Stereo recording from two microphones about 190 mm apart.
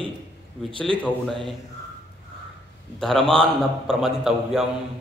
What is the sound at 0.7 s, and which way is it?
Speech, 25° right (ahead or behind).